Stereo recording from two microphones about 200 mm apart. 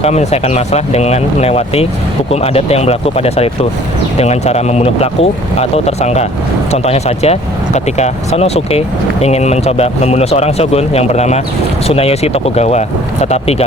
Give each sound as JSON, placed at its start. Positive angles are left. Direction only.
{"t": 0.0, "sound": "speech", "side_deg": 35}